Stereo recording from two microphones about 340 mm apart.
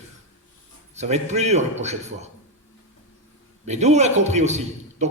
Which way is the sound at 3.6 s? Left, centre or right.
Centre.